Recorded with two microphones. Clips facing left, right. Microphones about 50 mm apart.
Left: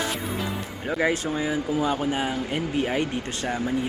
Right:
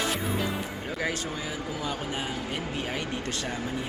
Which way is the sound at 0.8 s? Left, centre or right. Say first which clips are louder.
Left 9 dB; left.